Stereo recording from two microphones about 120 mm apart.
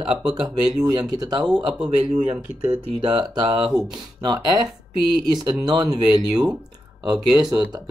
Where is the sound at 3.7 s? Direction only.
35° right (ahead or behind).